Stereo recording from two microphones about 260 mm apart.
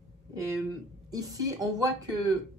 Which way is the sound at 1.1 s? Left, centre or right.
Centre.